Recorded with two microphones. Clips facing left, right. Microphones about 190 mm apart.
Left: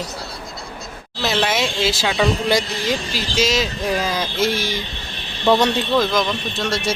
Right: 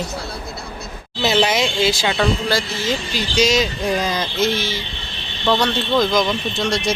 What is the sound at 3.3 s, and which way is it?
Speech, centre (ahead or behind).